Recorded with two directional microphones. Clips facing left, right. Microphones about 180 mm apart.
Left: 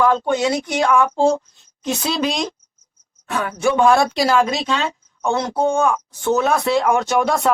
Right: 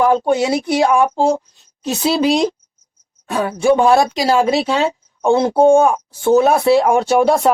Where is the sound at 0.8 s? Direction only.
25° right (ahead or behind).